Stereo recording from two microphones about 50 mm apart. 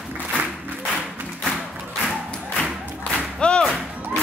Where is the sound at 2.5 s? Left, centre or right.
Left.